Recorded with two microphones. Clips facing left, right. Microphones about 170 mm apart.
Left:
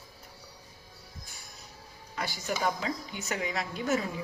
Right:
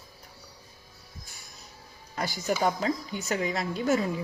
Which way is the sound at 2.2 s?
40° right (ahead or behind).